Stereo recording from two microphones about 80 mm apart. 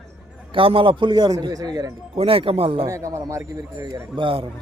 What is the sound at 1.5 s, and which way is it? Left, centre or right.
Speech, right.